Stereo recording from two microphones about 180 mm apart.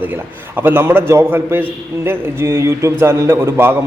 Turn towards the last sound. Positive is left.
turn(degrees=-15)  # may be behind; listen again after turning